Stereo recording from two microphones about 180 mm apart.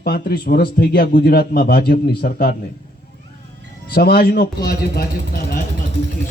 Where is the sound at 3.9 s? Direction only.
60° left (ahead or behind).